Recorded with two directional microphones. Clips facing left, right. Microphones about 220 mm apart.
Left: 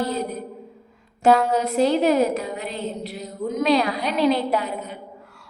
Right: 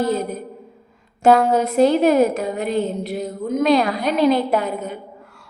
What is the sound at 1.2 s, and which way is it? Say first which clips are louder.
A woman's voice: right 3 dB; 50° right (ahead or behind).